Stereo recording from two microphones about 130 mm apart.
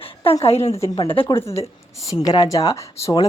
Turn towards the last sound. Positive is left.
turn(degrees=30)  # may be behind; listen again after turning